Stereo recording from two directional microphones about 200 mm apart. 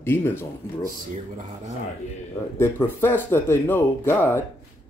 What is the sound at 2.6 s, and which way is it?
Speech, 10° left (ahead or behind).